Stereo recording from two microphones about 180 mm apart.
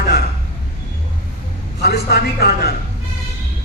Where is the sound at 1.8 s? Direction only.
65° left (ahead or behind).